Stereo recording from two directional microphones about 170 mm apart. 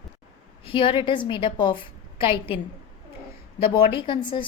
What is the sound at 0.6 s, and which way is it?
A woman's voice, 30° left (ahead or behind).